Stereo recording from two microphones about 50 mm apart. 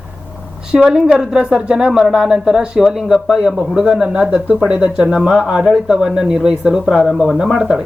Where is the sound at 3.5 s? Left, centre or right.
Centre.